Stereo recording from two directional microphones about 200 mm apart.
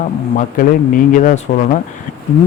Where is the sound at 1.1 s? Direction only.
45° left (ahead or behind).